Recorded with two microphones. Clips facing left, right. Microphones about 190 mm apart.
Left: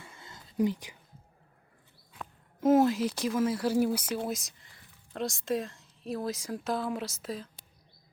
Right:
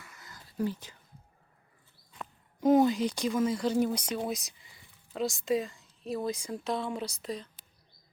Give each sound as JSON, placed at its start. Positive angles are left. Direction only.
{"t": 0.0, "sound": "whispering", "side_deg": 25}
{"t": 2.1, "sound": "speech", "side_deg": 0}